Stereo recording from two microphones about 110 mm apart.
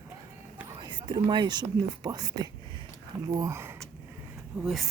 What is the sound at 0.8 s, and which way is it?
Speech, 40° right (ahead or behind).